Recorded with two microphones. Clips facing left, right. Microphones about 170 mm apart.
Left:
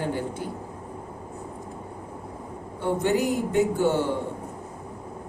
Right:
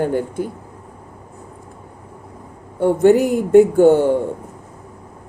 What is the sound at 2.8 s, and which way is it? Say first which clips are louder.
Speech: right 11 dB; 55° right (ahead or behind).